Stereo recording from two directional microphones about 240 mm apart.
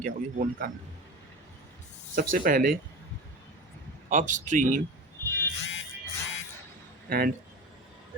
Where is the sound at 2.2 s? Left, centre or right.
Right.